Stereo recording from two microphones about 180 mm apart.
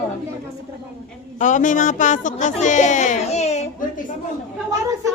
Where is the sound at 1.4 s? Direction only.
45° left (ahead or behind).